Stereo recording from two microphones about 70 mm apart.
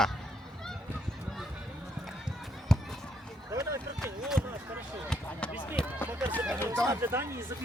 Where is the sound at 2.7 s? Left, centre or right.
Centre.